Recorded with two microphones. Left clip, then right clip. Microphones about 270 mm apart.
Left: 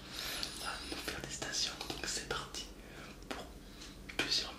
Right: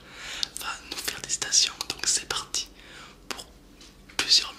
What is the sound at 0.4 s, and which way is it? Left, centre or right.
Whispering, right.